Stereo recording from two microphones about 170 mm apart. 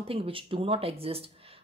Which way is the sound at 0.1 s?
30° right (ahead or behind).